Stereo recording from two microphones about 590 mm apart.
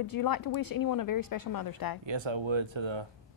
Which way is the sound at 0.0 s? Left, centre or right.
Left.